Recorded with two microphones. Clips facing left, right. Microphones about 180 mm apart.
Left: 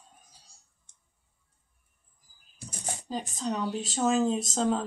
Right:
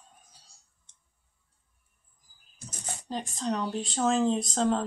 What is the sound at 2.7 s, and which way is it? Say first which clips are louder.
Speech: left 1 dB; centre (ahead or behind).